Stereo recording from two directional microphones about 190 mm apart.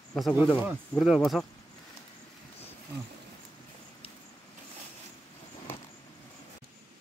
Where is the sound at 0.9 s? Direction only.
Centre (ahead or behind).